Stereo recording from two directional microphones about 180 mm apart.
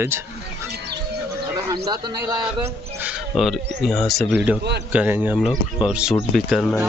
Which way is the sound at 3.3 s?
Centre (ahead or behind).